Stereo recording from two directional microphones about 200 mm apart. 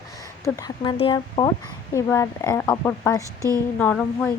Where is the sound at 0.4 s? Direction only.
15° left (ahead or behind).